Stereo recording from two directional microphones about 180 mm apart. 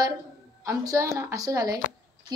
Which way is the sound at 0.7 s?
15° right (ahead or behind).